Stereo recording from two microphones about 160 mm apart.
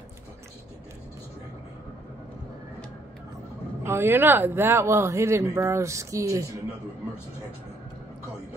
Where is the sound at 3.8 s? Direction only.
15° right (ahead or behind).